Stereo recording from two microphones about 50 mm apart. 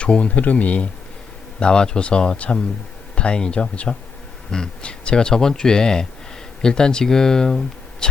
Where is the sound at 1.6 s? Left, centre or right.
Centre.